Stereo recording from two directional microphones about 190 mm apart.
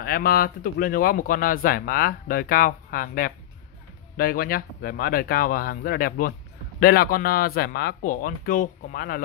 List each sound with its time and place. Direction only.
0.0 s speech: 50° left (ahead or behind)